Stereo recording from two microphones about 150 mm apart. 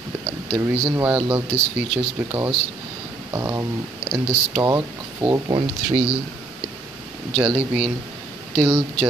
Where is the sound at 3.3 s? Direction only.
20° right (ahead or behind).